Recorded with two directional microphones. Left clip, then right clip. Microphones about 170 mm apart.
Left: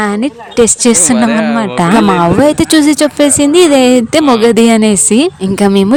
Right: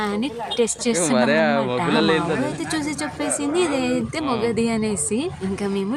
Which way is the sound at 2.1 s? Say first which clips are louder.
Left 13 dB; 65° left (ahead or behind).